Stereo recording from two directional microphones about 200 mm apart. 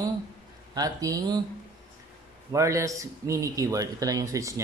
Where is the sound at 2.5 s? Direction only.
15° right (ahead or behind).